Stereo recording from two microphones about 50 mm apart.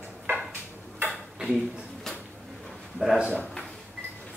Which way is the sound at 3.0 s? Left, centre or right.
Right.